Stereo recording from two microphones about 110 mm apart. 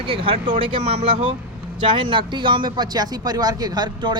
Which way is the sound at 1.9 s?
50° right (ahead or behind).